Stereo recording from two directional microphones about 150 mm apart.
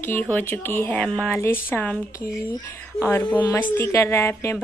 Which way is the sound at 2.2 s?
20° left (ahead or behind).